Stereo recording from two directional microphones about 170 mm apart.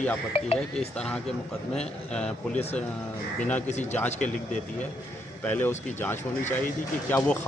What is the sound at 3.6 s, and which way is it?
Speech, 40° left (ahead or behind).